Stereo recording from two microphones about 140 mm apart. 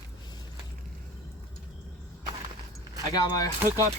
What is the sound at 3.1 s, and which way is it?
Speech, 25° left (ahead or behind).